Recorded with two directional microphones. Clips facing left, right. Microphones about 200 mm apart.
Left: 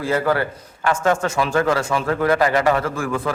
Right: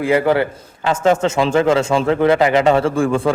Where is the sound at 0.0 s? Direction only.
20° right (ahead or behind).